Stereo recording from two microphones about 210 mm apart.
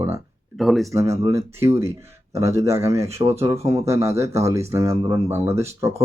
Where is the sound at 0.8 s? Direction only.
15° right (ahead or behind).